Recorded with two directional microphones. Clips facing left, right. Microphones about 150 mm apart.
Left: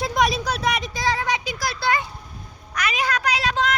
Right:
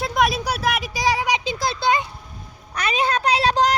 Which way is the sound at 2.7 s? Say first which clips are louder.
Right 3 dB; 30° right (ahead or behind).